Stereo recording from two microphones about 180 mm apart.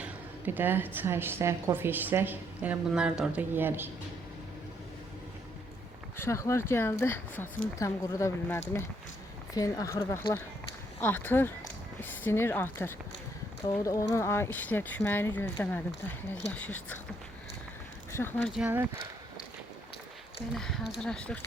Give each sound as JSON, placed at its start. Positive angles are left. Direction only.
{"t": 0.0, "sound": "a woman's voice", "side_deg": -10}
{"t": 6.1, "sound": "speech", "side_deg": 15}
{"t": 18.1, "sound": "speech", "side_deg": 10}
{"t": 18.5, "sound": "a woman's voice", "side_deg": -10}
{"t": 20.5, "sound": "speech", "side_deg": 0}